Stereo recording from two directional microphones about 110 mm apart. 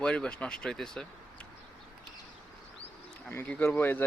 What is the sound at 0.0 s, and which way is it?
Speech, 10° left (ahead or behind).